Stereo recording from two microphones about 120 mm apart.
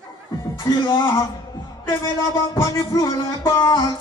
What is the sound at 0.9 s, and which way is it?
Music, 20° left (ahead or behind).